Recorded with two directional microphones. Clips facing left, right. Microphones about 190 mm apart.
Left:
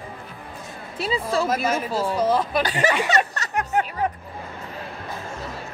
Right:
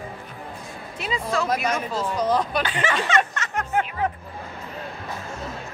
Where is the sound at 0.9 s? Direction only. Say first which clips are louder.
Left 4 dB; 35° left (ahead or behind).